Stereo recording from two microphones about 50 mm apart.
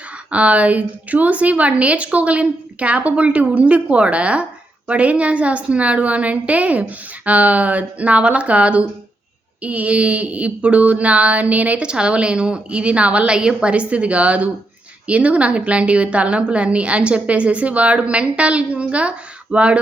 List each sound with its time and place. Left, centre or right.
0.3 s a woman's voice: right
11.8 s a woman's voice: centre